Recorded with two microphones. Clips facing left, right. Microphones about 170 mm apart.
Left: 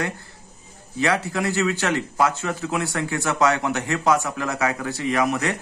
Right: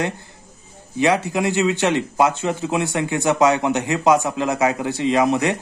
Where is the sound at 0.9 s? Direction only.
20° right (ahead or behind).